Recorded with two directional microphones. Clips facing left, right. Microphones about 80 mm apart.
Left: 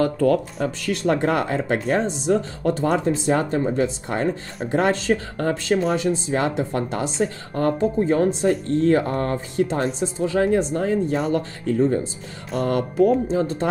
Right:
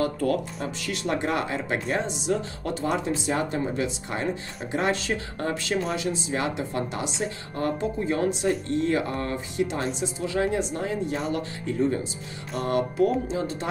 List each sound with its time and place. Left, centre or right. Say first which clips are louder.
0.0 s speech: left 6 dB; left